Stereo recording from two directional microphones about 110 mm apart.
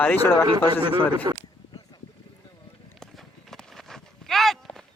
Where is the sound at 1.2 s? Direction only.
40° right (ahead or behind).